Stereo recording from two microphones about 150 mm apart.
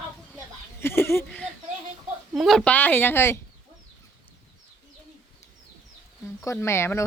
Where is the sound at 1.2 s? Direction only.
5° left (ahead or behind).